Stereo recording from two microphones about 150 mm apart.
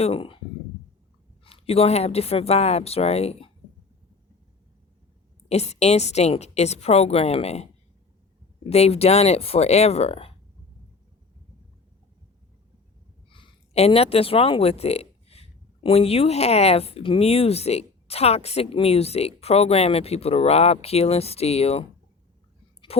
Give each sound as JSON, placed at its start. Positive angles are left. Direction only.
{"t": 0.0, "sound": "speech", "side_deg": 40}
{"t": 1.5, "sound": "speech", "side_deg": 40}
{"t": 5.5, "sound": "speech", "side_deg": 45}
{"t": 8.7, "sound": "speech", "side_deg": 45}
{"t": 13.3, "sound": "speech", "side_deg": 40}
{"t": 22.9, "sound": "speech", "side_deg": 40}